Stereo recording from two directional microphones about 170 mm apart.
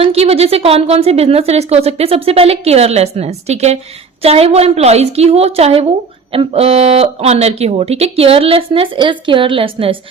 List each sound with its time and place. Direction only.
0.0 s a woman's voice: 35° right (ahead or behind)